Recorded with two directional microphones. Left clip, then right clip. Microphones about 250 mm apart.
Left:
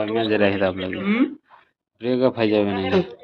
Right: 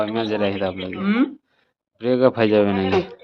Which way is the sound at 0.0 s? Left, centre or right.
Centre.